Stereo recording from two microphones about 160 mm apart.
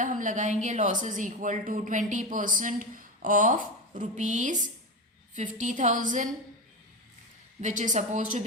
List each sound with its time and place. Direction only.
0.0 s speech: 50° right (ahead or behind)
7.6 s speech: 50° right (ahead or behind)